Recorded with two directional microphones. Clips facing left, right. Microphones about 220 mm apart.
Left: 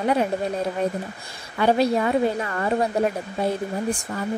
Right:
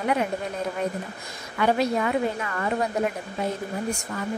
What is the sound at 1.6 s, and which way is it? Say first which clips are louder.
Speech: left 3 dB; 30° left (ahead or behind).